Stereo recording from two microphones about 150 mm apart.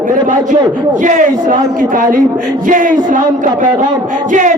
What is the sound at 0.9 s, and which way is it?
A man's voice, 55° right (ahead or behind).